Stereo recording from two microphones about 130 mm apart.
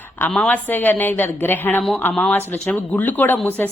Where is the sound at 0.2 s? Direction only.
10° left (ahead or behind).